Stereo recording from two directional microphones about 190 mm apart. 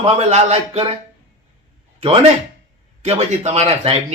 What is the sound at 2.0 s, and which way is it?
A man's voice, 30° right (ahead or behind).